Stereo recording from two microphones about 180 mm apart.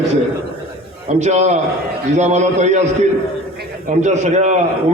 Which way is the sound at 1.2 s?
40° right (ahead or behind).